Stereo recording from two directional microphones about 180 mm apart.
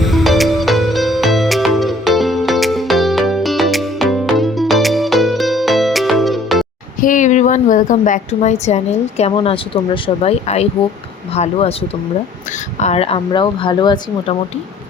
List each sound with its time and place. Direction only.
0.0 s music: centre (ahead or behind)
7.0 s a woman's voice: 45° left (ahead or behind); by 14.3 s 25° left (ahead or behind)